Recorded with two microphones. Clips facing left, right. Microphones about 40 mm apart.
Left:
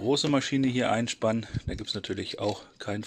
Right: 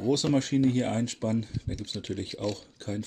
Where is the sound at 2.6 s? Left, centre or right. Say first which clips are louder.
Left 1 dB; left.